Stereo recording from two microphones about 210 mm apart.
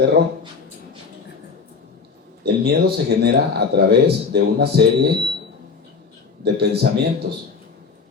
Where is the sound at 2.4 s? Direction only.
50° right (ahead or behind).